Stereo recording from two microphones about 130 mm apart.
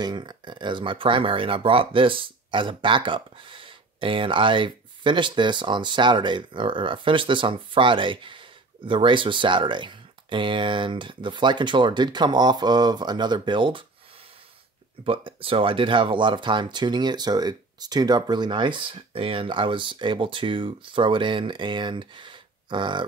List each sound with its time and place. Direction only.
0.0 s speech: 35° right (ahead or behind)
15.0 s speech: 45° right (ahead or behind)